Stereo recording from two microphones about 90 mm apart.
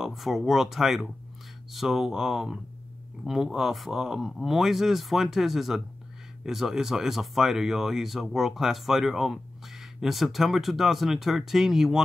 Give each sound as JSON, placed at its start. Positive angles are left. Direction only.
{"t": 0.0, "sound": "speech", "side_deg": 0}